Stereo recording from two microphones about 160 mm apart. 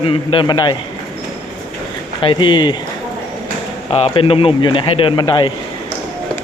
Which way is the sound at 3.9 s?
35° left (ahead or behind).